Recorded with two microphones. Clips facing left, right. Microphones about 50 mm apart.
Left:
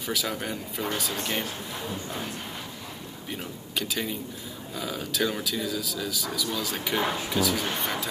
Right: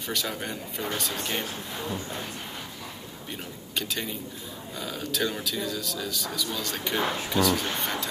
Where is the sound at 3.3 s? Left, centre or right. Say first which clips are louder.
Left 3 dB; centre.